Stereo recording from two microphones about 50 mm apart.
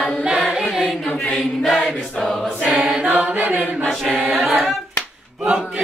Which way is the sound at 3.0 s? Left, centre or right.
Right.